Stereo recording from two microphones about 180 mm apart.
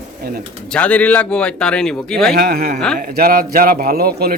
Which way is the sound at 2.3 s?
55° right (ahead or behind).